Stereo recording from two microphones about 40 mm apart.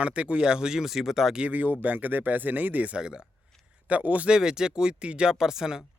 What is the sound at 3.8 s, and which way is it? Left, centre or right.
Speech, right.